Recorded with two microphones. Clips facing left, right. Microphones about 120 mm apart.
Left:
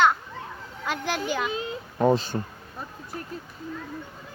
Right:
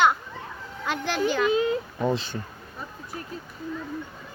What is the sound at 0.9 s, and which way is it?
Speech, 5° left (ahead or behind).